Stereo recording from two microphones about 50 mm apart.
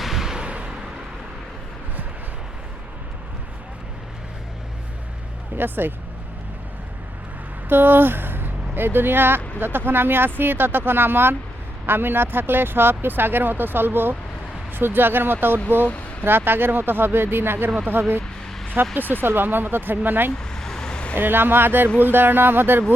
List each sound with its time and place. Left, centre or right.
0.0 s a sound: centre
0.3 s a sound: right
5.5 s speech: right
7.7 s speech: right
18.9 s speech: right
20.4 s vehicle: centre
21.2 s speech: right